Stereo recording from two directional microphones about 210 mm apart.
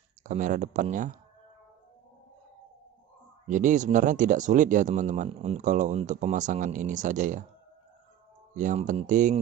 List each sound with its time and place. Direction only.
0.2 s speech: 35° right (ahead or behind)
3.4 s speech: 35° right (ahead or behind)
8.5 s speech: 35° right (ahead or behind)